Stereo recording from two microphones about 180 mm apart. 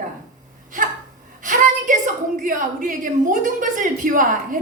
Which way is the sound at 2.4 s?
45° right (ahead or behind).